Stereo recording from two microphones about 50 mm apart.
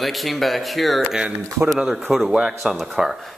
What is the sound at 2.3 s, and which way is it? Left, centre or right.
Speech, centre.